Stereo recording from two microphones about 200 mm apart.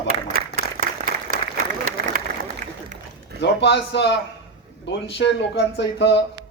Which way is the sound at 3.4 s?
60° left (ahead or behind).